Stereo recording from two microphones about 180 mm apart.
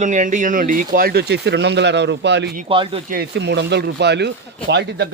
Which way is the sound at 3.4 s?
75° right (ahead or behind).